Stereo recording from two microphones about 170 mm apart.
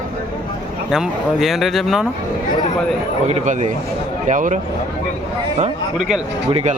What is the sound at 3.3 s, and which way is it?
A man's voice, 40° right (ahead or behind).